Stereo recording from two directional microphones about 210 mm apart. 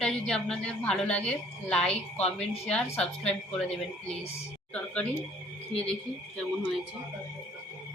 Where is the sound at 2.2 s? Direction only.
30° left (ahead or behind).